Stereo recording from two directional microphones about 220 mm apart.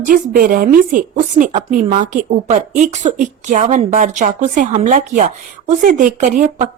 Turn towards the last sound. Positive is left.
turn(degrees=-35)  # may be behind; listen again after turning